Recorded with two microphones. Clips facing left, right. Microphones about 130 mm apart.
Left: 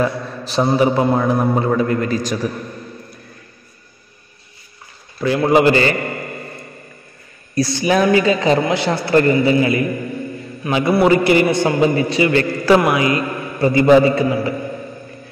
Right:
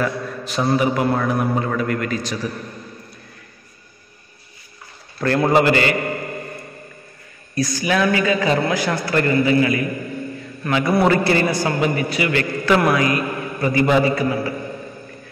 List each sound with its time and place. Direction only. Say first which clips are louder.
0.0 s a man's voice: left 3 dB; 30° left (ahead or behind)
5.2 s a man's voice: left 1 dB; 5° left (ahead or behind)
5.5 s a man's voice: left 4 dB; 25° left (ahead or behind)
7.8 s a man's voice: left 5 dB; 25° left (ahead or behind)
10.9 s a man's voice: left 4 dB; 10° left (ahead or behind); by 12.7 s 30° left (ahead or behind)
12.7 s a man's voice: left 2 dB; 20° left (ahead or behind)